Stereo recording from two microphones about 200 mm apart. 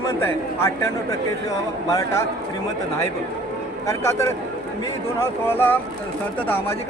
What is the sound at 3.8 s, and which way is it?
Speech, 15° left (ahead or behind).